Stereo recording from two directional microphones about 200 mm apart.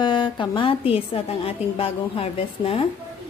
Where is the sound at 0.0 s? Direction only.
25° left (ahead or behind).